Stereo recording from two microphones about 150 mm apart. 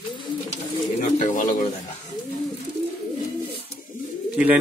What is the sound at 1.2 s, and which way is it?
Bird, 60° left (ahead or behind).